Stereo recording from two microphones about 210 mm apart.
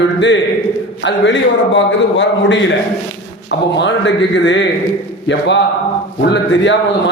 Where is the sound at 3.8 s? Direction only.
60° left (ahead or behind).